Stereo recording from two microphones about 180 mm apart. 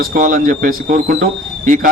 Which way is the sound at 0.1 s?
45° right (ahead or behind).